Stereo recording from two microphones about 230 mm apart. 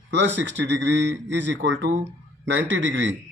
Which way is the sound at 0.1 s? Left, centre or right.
Right.